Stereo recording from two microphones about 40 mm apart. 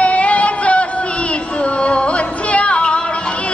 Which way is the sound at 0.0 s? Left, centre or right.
Left.